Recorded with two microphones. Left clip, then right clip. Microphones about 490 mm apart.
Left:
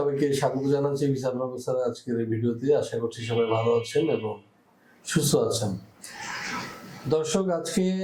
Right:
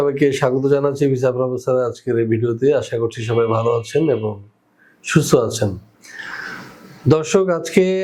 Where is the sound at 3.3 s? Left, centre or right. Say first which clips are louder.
Right 6 dB; right.